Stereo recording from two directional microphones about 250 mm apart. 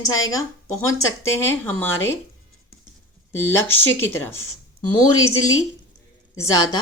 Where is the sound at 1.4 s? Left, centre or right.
Centre.